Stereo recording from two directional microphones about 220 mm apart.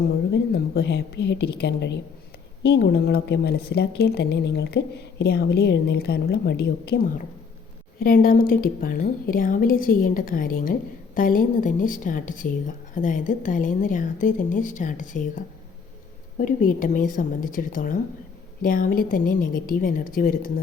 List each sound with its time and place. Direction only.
0.5 s a woman's voice: 45° left (ahead or behind)